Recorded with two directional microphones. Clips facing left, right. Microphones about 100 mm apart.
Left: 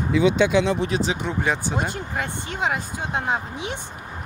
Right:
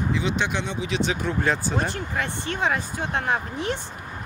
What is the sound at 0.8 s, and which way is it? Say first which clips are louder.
Speech: left 2 dB; 40° left (ahead or behind).